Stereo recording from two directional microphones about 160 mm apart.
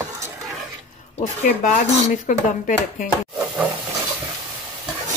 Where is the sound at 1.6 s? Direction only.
55° left (ahead or behind).